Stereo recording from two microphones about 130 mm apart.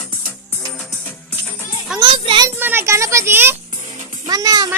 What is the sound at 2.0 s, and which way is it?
Speech, 40° right (ahead or behind).